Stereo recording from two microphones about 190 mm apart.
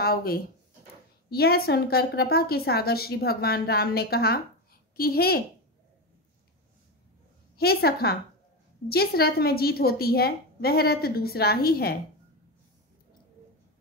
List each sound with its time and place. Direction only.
0.0 s a woman's voice: 50° left (ahead or behind)
7.5 s a woman's voice: 55° left (ahead or behind)